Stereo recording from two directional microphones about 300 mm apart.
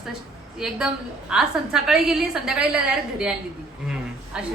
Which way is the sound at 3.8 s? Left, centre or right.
Centre.